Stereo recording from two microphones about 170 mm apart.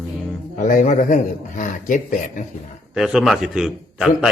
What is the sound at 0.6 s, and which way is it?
A man's voice, 45° left (ahead or behind).